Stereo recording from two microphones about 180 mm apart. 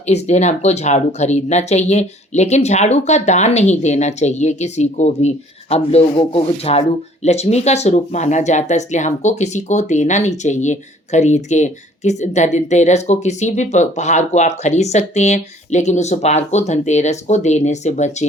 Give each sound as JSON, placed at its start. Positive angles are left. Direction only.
{"t": 0.1, "sound": "speech", "side_deg": 40}